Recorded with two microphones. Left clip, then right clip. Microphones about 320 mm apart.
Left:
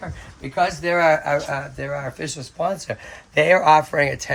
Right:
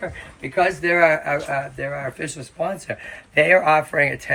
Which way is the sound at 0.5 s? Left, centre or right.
Centre.